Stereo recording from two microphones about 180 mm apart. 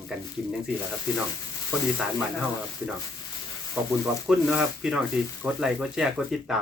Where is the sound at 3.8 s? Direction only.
5° right (ahead or behind).